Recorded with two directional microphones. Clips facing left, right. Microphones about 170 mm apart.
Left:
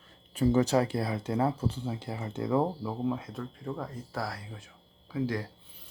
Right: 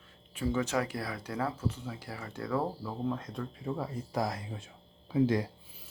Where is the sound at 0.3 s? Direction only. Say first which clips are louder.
Left 6 dB; 35° left (ahead or behind); by 2.9 s 20° left (ahead or behind).